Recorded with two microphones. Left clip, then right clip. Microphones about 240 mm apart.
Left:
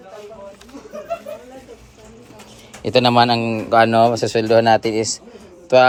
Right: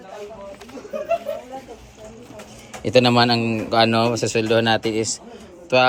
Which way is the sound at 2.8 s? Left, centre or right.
Centre.